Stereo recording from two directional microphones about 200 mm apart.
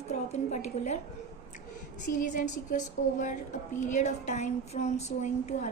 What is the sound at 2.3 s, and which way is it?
A woman's voice, 40° left (ahead or behind).